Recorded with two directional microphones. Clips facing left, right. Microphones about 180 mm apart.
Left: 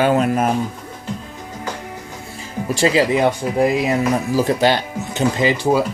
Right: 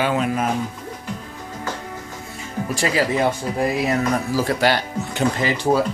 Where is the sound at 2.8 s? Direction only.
25° left (ahead or behind).